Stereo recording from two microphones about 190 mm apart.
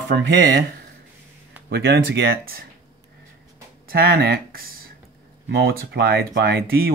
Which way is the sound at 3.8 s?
55° right (ahead or behind).